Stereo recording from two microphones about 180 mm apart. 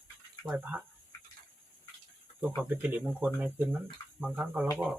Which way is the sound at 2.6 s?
5° right (ahead or behind).